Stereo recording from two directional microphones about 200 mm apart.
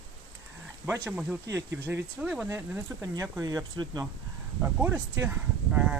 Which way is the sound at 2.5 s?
15° right (ahead or behind).